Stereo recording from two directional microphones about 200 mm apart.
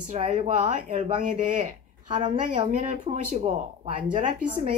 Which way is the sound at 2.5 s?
40° right (ahead or behind).